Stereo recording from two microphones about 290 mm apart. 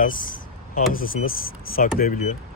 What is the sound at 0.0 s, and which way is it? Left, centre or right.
Vehicle, left.